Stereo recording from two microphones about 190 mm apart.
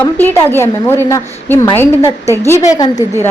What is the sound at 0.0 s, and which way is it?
A woman's voice, 10° left (ahead or behind).